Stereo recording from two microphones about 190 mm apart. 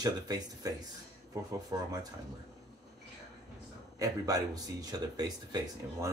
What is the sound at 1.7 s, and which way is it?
Speech, 20° right (ahead or behind).